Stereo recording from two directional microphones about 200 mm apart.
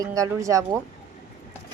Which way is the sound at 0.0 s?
15° right (ahead or behind).